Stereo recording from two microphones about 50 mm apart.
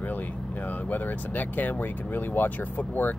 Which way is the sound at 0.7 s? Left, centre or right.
Left.